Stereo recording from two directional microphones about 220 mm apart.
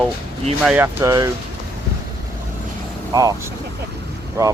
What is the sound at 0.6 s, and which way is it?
Speech, 10° right (ahead or behind).